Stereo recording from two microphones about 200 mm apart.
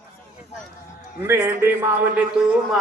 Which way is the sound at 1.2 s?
10° right (ahead or behind).